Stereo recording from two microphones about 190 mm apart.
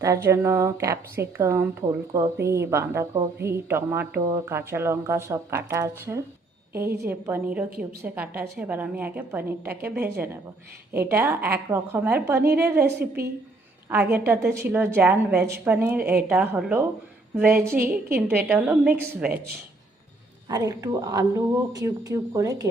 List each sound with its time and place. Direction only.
0.0 s a woman's voice: 15° right (ahead or behind)
20.5 s a woman's voice: 15° right (ahead or behind)